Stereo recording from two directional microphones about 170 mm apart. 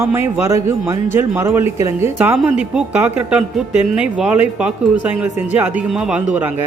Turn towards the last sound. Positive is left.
turn(degrees=-10)  # may be behind; listen again after turning